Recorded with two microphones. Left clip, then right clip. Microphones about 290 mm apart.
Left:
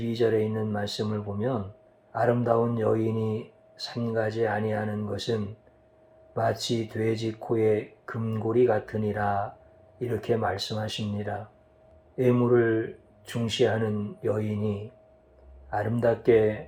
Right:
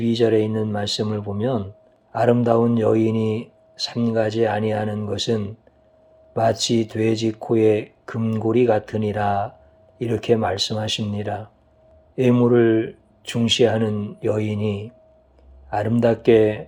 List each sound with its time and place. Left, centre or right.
0.0 s speech: right